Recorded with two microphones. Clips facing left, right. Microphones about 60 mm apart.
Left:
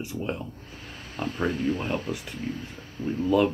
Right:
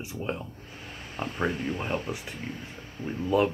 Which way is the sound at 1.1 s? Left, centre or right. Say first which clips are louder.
Left 2 dB; centre.